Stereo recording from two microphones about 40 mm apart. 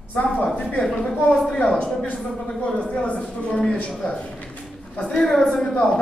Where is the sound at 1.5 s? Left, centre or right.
Left.